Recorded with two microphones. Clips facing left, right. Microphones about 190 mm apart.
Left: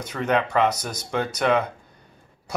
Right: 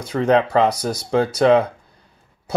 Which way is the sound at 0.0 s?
30° right (ahead or behind).